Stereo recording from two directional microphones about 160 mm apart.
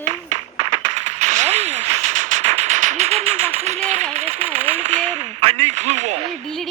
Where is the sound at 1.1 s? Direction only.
45° right (ahead or behind).